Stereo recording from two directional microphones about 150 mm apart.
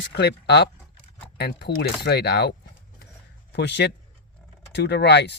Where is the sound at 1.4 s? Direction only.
90° left.